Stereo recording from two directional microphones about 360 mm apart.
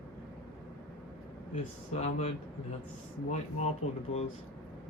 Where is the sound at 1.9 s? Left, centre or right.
Centre.